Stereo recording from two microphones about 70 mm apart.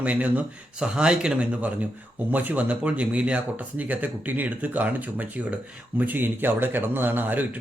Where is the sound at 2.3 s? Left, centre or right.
Right.